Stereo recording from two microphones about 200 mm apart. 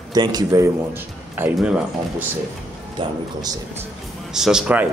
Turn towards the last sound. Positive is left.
turn(degrees=-5)  # may be behind; listen again after turning